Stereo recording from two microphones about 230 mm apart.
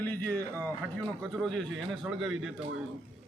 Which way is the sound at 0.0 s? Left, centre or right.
Centre.